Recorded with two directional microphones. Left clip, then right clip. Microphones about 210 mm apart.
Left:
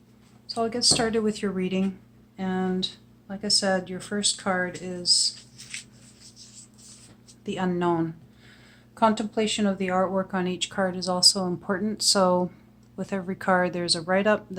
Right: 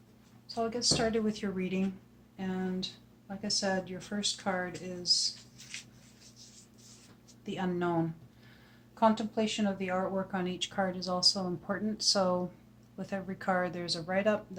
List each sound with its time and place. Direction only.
0.4 s speech: 40° left (ahead or behind)
7.4 s speech: 35° left (ahead or behind)
9.0 s speech: 45° left (ahead or behind)